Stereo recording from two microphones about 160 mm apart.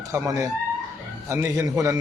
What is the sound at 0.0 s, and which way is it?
A man's voice, 20° right (ahead or behind).